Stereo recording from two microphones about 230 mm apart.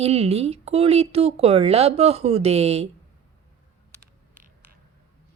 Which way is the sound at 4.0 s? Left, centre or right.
Right.